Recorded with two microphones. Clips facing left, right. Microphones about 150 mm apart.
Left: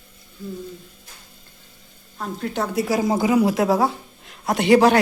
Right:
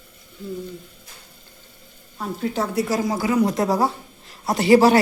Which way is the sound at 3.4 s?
5° left (ahead or behind).